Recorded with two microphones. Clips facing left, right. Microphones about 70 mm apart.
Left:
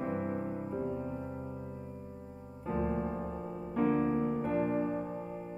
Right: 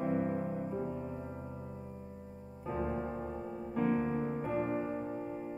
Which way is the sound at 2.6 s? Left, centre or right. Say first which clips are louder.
Left 3 dB; centre.